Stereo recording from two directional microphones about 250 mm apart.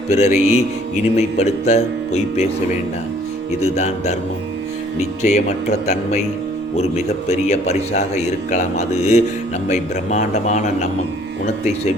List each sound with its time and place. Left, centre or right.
0.1 s a man's voice: left
3.6 s a man's voice: left
5.2 s a man's voice: left